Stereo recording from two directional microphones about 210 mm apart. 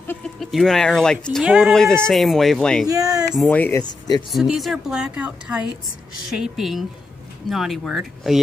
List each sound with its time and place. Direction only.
0.0 s a woman's voice: 5° left (ahead or behind)
2.9 s speech: 15° right (ahead or behind)
3.3 s speech: 10° left (ahead or behind)
4.3 s a woman's voice: centre (ahead or behind)